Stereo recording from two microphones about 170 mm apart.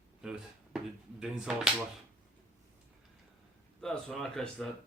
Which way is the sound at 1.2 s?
5° right (ahead or behind).